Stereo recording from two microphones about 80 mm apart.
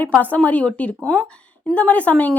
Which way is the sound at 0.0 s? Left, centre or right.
Centre.